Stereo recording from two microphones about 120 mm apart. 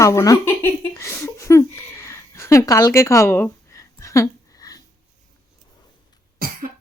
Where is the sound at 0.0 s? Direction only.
25° left (ahead or behind).